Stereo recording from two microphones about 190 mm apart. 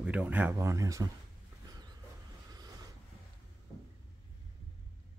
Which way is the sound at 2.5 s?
20° right (ahead or behind).